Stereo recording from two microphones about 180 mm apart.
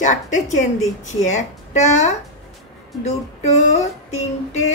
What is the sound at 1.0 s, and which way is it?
Female singing, 40° left (ahead or behind).